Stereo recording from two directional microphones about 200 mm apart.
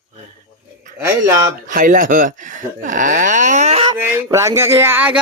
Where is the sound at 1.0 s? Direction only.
15° right (ahead or behind).